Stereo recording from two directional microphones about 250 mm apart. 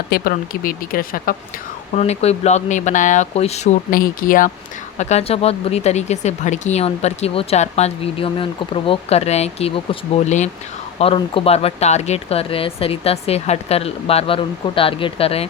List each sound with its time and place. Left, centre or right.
0.1 s speech: left